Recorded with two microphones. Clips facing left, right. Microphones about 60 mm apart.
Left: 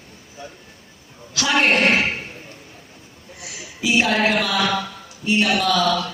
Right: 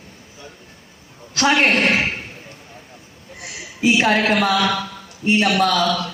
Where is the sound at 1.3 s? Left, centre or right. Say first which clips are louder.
Right 2 dB; right.